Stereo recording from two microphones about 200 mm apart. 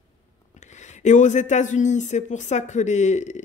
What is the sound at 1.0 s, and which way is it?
Speech, 35° left (ahead or behind).